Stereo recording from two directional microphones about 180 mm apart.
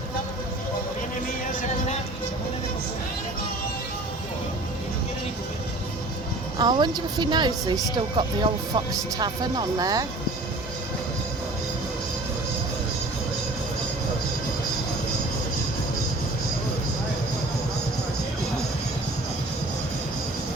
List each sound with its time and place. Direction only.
6.6 s speech: 25° right (ahead or behind)